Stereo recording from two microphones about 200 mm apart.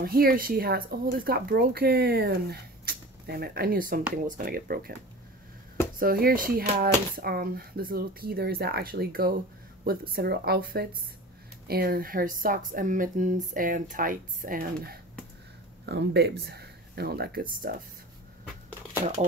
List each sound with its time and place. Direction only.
0.0 s speech: 50° right (ahead or behind)
5.9 s speech: 45° right (ahead or behind)
15.8 s speech: 60° right (ahead or behind); by 17.8 s 45° right (ahead or behind)